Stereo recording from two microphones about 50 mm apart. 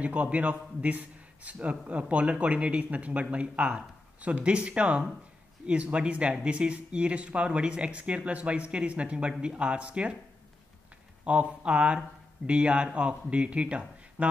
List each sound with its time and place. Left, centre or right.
0.0 s a man's voice: right
11.2 s a man's voice: right